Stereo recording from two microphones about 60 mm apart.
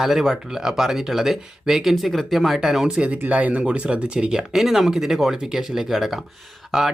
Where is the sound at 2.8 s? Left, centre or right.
Centre.